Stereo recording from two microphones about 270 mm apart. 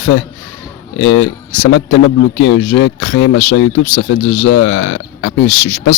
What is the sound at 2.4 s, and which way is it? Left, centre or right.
Speech, left.